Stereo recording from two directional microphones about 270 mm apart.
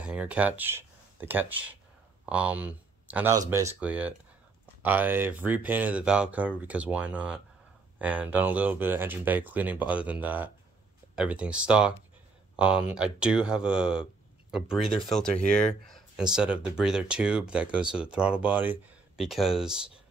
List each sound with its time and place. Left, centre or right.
0.0 s speech: centre
15.3 s speech: left
16.3 s speech: centre